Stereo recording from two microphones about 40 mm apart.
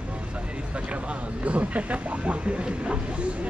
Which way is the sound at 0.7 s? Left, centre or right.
Right.